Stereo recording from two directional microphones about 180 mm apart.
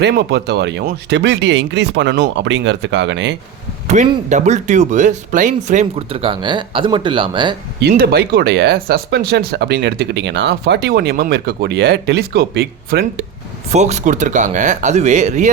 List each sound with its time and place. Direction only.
0.0 s speech: 70° right (ahead or behind); by 3.3 s 85° right
4.0 s speech: 40° right (ahead or behind)
7.8 s speech: 60° right (ahead or behind)
13.7 s speech: 40° right (ahead or behind)